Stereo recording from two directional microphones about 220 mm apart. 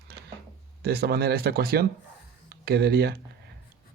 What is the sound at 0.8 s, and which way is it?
Speech, 45° right (ahead or behind).